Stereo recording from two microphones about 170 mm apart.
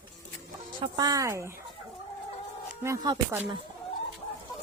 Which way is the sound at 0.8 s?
25° right (ahead or behind).